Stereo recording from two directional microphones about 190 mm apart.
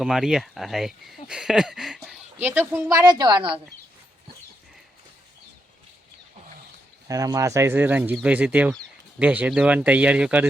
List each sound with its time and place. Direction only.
0.0 s speech: centre (ahead or behind); by 3.6 s 25° right (ahead or behind)
7.1 s speech: 20° right (ahead or behind)